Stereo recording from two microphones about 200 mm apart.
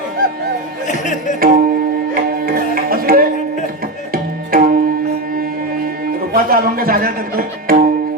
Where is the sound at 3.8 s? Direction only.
45° right (ahead or behind).